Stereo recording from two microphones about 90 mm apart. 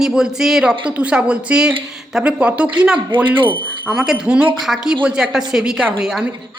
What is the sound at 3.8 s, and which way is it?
A woman's voice, 5° right (ahead or behind).